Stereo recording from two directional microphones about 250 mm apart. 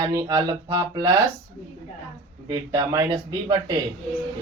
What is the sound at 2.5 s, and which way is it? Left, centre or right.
Speech, centre.